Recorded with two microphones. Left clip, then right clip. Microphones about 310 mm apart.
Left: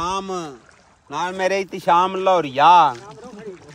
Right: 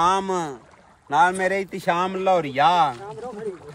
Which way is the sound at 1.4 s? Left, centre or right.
Centre.